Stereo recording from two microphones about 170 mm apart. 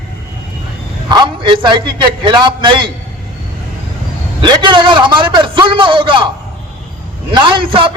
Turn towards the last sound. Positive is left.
turn(degrees=-30)  # may be behind; listen again after turning